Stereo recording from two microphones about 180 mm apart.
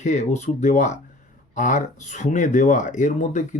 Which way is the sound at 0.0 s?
40° left (ahead or behind).